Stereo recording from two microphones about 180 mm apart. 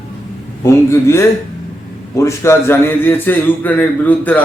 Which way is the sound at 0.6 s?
15° left (ahead or behind).